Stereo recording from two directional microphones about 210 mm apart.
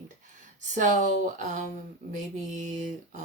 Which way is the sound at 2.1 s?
35° right (ahead or behind).